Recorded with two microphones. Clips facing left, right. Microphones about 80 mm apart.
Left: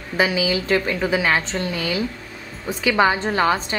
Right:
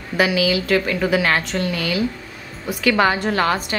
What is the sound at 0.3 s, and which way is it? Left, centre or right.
Speech, left.